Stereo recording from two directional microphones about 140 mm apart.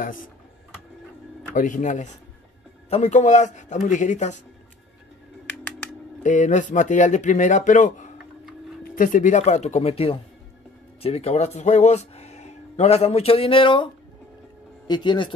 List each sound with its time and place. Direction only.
1.5 s speech: 65° left (ahead or behind)
5.5 s typing: 10° left (ahead or behind)
6.2 s speech: 60° left (ahead or behind)
8.8 s speech: 80° left; by 13.8 s 35° left (ahead or behind)
14.9 s speech: 30° left (ahead or behind)